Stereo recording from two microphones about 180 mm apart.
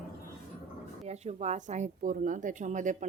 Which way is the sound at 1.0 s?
40° right (ahead or behind).